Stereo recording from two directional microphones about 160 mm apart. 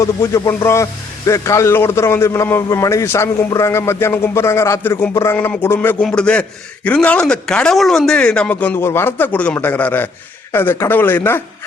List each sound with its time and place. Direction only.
0.0 s a man's voice: 20° left (ahead or behind)